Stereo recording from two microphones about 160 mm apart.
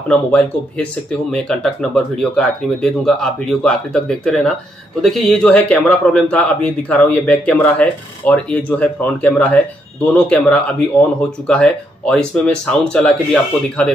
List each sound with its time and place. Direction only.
0.1 s speech: 5° left (ahead or behind)